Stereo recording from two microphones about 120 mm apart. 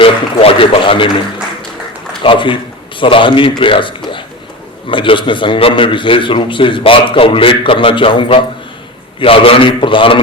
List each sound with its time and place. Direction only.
0.0 s a man's voice: 50° left (ahead or behind)
2.2 s a man's voice: 45° left (ahead or behind)